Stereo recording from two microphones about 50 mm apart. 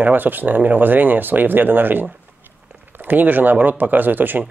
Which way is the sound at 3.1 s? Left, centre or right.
Right.